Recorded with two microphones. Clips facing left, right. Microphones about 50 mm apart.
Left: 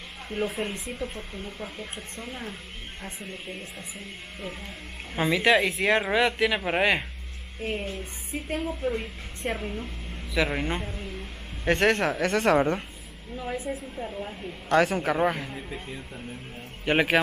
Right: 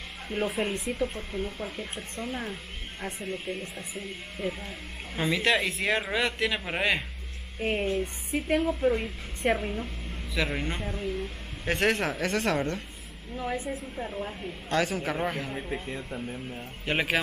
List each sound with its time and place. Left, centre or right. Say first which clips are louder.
0.3 s a man's voice: right 1 dB; centre
7.6 s speech: right 4 dB; centre
10.3 s a man's voice: left 4 dB; centre
13.9 s speech: even; centre
14.7 s speech: left 5 dB; centre
15.5 s speech: right 3 dB; right
16.9 s a man's voice: left 5 dB; centre